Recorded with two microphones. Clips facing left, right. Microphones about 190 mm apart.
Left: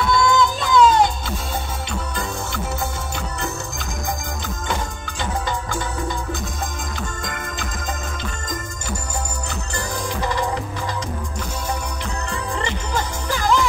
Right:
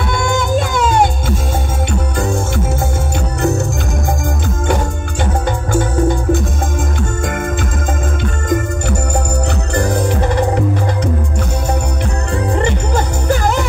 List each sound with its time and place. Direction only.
0.1 s music: 50° right (ahead or behind)
5.7 s music: 50° right (ahead or behind)
9.8 s music: 60° right (ahead or behind)
12.5 s music: 50° right (ahead or behind)